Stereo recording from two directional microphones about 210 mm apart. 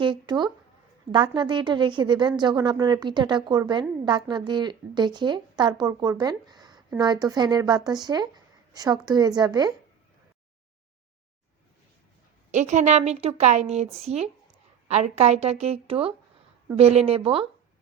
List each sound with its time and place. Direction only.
0.0 s a sound: 20° right (ahead or behind)
1.1 s a woman's voice: 20° right (ahead or behind)
12.5 s a woman's voice: 35° right (ahead or behind)